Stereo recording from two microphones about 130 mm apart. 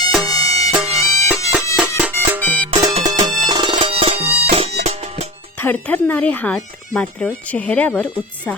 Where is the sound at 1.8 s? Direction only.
10° right (ahead or behind).